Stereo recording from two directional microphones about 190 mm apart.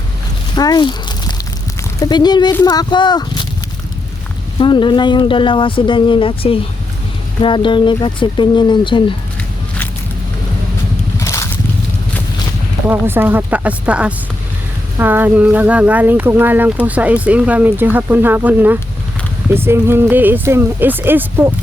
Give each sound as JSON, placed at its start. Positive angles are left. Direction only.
{"t": 0.5, "sound": "speech", "side_deg": 20}
{"t": 4.6, "sound": "speech", "side_deg": 25}
{"t": 11.2, "sound": "a sound", "side_deg": 15}
{"t": 12.9, "sound": "speech", "side_deg": -10}